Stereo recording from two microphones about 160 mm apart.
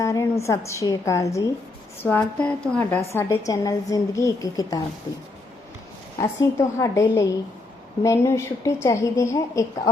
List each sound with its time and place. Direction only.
0.0 s a sound: 20° left (ahead or behind)
0.4 s a woman's voice: 20° left (ahead or behind)
6.1 s a woman's voice: 20° left (ahead or behind)